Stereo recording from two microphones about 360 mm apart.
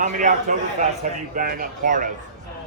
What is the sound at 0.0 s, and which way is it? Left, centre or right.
Speech, right.